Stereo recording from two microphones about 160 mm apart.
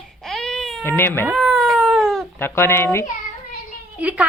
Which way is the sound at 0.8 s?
15° left (ahead or behind).